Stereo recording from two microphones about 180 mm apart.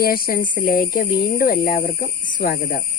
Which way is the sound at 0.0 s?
55° left (ahead or behind).